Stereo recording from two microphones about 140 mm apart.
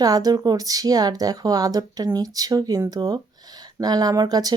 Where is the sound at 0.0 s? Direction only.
25° right (ahead or behind).